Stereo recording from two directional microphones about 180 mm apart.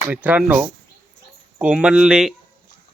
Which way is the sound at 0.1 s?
10° right (ahead or behind).